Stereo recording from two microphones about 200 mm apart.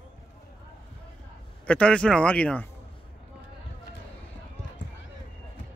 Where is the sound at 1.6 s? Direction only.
5° left (ahead or behind).